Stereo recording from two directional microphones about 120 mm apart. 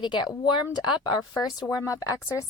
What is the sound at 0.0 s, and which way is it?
A woman's voice, 35° left (ahead or behind).